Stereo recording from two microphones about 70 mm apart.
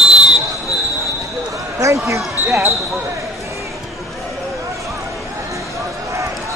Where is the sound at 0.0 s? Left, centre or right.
Centre.